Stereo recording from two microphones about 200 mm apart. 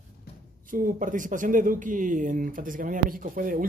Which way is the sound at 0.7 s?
45° right (ahead or behind).